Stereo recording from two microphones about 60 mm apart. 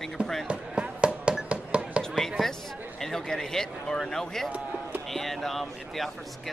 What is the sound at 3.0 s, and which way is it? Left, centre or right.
Speech, centre.